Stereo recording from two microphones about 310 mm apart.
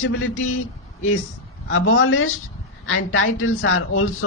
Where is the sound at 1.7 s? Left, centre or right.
Left.